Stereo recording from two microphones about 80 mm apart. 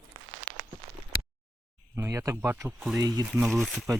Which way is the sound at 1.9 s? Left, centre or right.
Right.